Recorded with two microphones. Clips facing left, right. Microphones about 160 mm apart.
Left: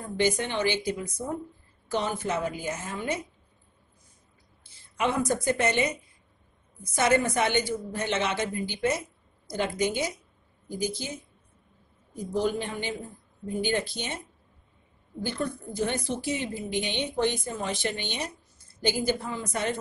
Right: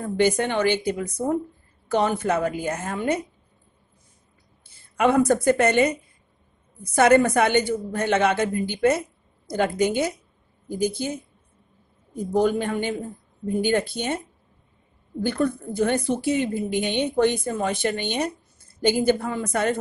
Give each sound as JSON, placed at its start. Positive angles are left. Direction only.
{"t": 0.0, "sound": "a woman's voice", "side_deg": -55}
{"t": 4.9, "sound": "a woman's voice", "side_deg": -55}
{"t": 12.3, "sound": "a woman's voice", "side_deg": -50}
{"t": 15.2, "sound": "a woman's voice", "side_deg": -55}